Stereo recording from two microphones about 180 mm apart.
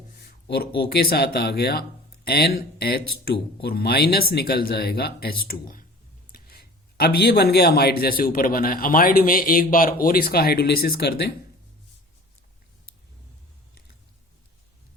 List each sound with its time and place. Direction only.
0.2 s speech: 60° left (ahead or behind)